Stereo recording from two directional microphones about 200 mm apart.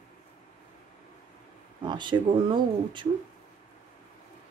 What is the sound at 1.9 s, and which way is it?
Speech, 20° right (ahead or behind).